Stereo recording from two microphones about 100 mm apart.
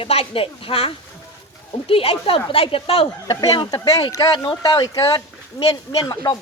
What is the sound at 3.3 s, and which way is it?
Speech, 45° left (ahead or behind).